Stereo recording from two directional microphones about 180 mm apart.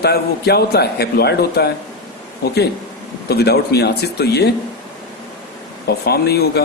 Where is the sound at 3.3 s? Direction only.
60° left (ahead or behind).